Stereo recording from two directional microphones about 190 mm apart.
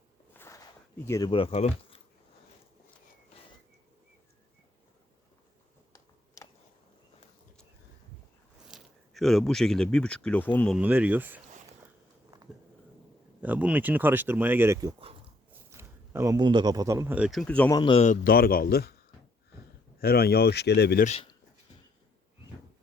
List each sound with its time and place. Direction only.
0.3 s a sound: 15° left (ahead or behind)
1.0 s speech: 15° left (ahead or behind)
1.3 s speech: 30° left (ahead or behind)
5.9 s a sound: 15° left (ahead or behind)
8.6 s speech: centre (ahead or behind)
10.8 s speech: 10° right (ahead or behind)
13.4 s speech: 10° right (ahead or behind)
17.7 s speech: 25° left (ahead or behind)
18.0 s speech: 45° left (ahead or behind)
20.0 s speech: 55° left (ahead or behind)
21.0 s speech: 35° left (ahead or behind)